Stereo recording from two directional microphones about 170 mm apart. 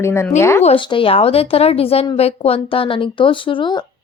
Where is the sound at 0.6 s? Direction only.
35° left (ahead or behind).